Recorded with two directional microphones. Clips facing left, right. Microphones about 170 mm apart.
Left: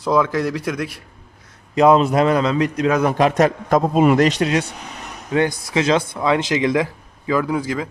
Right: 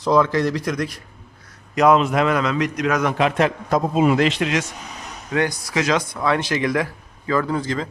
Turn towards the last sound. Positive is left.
turn(degrees=5)  # may be behind; listen again after turning